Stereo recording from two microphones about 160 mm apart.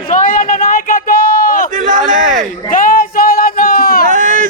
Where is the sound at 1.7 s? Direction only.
55° right (ahead or behind).